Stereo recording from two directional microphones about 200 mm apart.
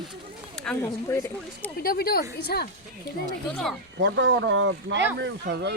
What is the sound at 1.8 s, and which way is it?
Speech, 50° left (ahead or behind).